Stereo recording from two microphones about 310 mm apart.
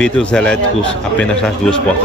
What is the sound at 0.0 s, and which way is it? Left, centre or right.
A man's voice, centre.